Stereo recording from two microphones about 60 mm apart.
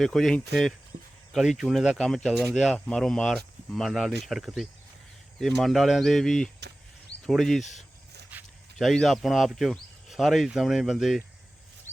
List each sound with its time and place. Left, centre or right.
0.0 s speech: centre
1.4 s speech: centre
8.3 s zipper: right
8.8 s speech: centre